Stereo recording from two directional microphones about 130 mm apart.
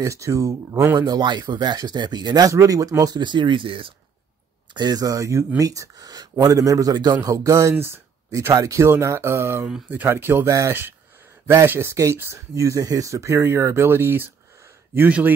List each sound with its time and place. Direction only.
0.0 s speech: 25° right (ahead or behind)
0.9 s speech: 35° right (ahead or behind)
4.7 s speech: 30° right (ahead or behind)
9.7 s speech: 10° right (ahead or behind)